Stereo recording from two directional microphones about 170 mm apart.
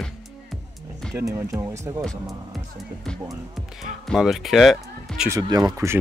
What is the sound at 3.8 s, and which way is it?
Speech, centre (ahead or behind).